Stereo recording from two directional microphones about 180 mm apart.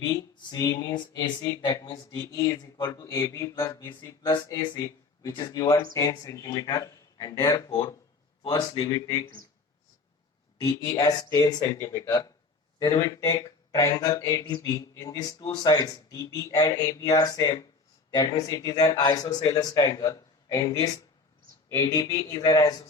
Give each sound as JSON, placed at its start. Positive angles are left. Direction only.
{"t": 0.0, "sound": "speech", "side_deg": 20}
{"t": 10.6, "sound": "speech", "side_deg": 20}